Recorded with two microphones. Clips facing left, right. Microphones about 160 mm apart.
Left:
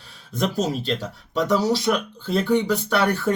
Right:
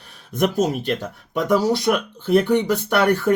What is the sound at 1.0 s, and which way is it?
Speech, 10° right (ahead or behind).